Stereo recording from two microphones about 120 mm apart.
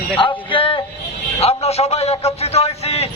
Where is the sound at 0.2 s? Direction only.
45° left (ahead or behind).